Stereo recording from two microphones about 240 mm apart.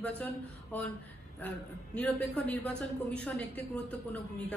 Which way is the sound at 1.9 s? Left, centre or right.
Centre.